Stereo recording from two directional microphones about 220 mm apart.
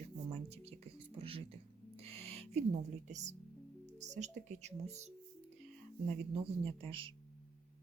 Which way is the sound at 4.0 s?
30° right (ahead or behind).